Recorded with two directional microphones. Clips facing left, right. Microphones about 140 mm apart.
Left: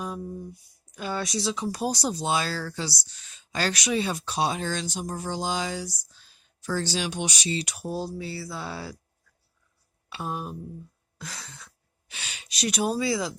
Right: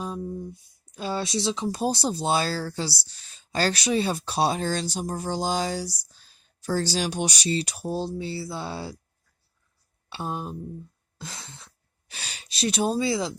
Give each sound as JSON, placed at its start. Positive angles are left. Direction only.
{"t": 0.0, "sound": "speech", "side_deg": -25}
{"t": 7.9, "sound": "a sound", "side_deg": -25}
{"t": 10.1, "sound": "speech", "side_deg": -30}